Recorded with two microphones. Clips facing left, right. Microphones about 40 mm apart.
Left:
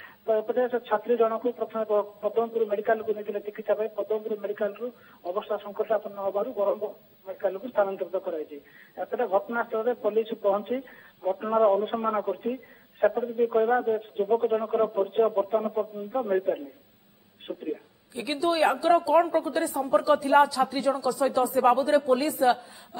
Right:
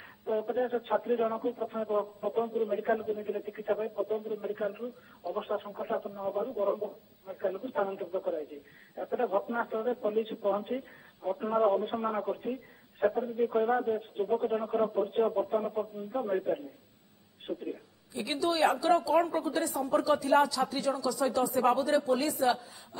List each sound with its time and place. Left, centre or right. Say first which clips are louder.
0.0 s a woman's voice: left 6 dB; centre